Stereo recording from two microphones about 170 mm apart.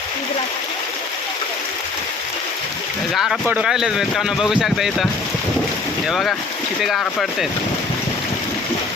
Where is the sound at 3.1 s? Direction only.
Centre (ahead or behind).